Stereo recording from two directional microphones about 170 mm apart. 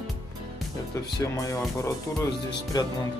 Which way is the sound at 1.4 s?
20° left (ahead or behind).